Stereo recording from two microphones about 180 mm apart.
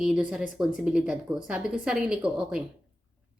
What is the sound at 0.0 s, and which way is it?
A woman's voice, 5° right (ahead or behind).